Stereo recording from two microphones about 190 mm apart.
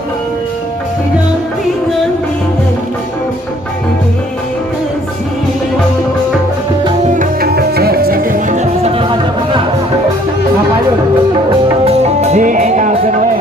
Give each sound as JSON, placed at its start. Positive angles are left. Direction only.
{"t": 7.0, "sound": "music", "side_deg": -40}
{"t": 11.9, "sound": "music", "side_deg": -35}